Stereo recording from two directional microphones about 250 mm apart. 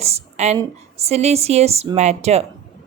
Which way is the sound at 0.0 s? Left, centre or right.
Right.